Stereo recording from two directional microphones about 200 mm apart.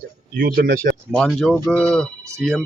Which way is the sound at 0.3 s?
45° right (ahead or behind).